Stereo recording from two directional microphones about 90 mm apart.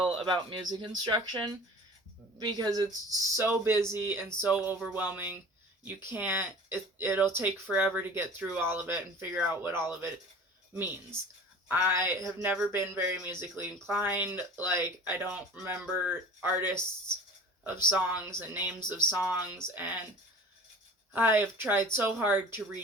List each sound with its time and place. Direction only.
0.1 s speech: 65° right (ahead or behind)
0.6 s speech: 50° right (ahead or behind)
2.4 s speech: 50° right (ahead or behind)
3.1 s speech: 30° right (ahead or behind)
4.8 s music: 10° right (ahead or behind)
5.8 s speech: 25° right (ahead or behind)
18.3 s speech: 20° right (ahead or behind)
21.1 s speech: 20° right (ahead or behind)